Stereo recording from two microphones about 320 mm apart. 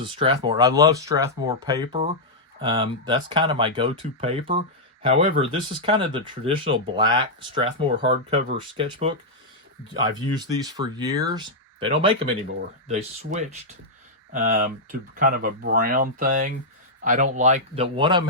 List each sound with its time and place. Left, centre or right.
0.2 s speech: centre
10.2 s speech: centre